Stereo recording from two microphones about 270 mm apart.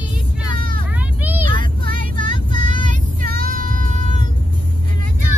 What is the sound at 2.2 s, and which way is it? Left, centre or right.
Vehicle, centre.